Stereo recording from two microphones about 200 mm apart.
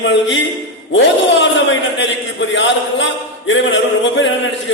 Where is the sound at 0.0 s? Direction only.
65° left (ahead or behind).